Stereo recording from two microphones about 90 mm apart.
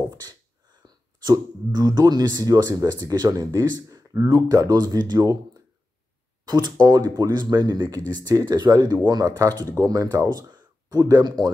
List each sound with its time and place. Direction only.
0.1 s a sound: 50° right (ahead or behind)
1.2 s speech: 50° right (ahead or behind)
6.4 s speech: 50° right (ahead or behind)